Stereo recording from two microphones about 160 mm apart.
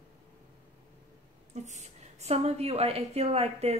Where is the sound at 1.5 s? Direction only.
45° right (ahead or behind).